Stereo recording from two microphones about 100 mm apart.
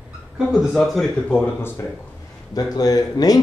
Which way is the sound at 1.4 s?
20° left (ahead or behind).